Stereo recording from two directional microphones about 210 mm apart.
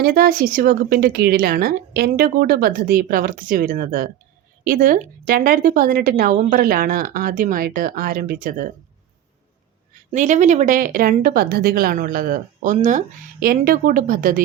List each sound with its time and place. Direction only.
0.0 s a woman's voice: 45° right (ahead or behind)
10.1 s speech: 35° right (ahead or behind)